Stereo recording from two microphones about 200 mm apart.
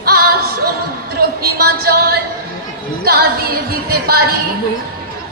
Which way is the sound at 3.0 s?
50° right (ahead or behind).